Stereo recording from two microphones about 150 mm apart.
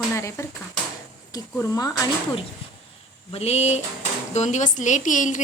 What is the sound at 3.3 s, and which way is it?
Speech, 45° left (ahead or behind).